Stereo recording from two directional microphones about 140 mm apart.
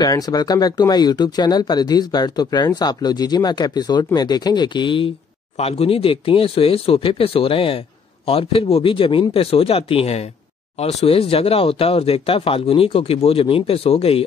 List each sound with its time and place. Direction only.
0.0 s speech: 25° left (ahead or behind); by 14.2 s 45° left (ahead or behind)